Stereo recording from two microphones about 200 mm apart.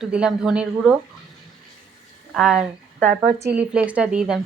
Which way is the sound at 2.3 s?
5° right (ahead or behind).